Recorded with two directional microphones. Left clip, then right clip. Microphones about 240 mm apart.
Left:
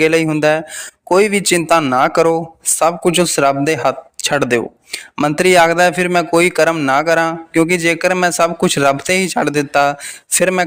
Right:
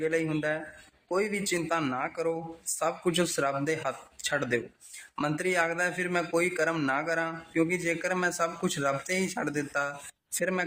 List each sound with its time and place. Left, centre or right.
0.0 s a man's voice: left